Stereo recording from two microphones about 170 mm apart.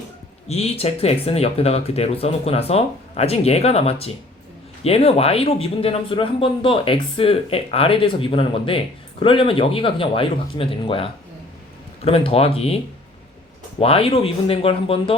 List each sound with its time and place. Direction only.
0.4 s speech: 35° left (ahead or behind)